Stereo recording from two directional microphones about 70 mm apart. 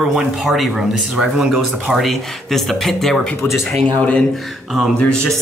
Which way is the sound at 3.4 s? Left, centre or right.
Left.